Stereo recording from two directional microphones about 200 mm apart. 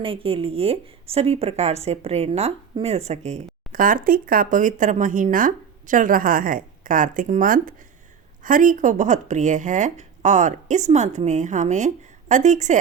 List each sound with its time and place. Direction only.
0.0 s a woman's voice: 25° right (ahead or behind)